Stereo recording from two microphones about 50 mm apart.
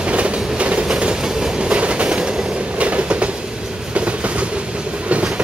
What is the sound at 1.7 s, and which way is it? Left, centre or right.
Train, right.